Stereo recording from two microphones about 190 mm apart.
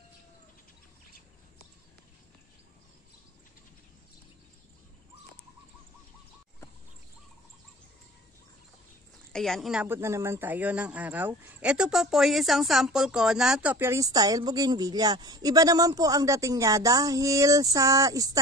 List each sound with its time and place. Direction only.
9.3 s speech: centre (ahead or behind); by 18.4 s 20° right (ahead or behind)